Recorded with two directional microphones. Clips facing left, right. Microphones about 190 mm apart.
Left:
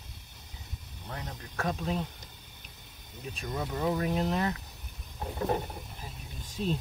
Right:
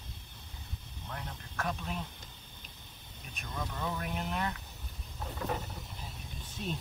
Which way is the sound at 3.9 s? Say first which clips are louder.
Left 7 dB; 35° left (ahead or behind).